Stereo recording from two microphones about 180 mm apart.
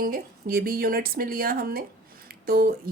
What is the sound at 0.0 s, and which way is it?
A woman's voice, 55° right (ahead or behind).